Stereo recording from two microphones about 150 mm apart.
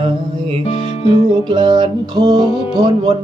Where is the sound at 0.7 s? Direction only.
45° left (ahead or behind).